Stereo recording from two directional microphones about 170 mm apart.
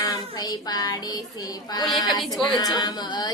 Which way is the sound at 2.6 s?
25° left (ahead or behind).